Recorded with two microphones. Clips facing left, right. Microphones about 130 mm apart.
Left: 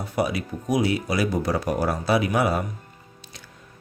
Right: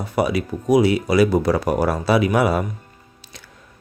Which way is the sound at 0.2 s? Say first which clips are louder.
Right 5 dB; 80° right.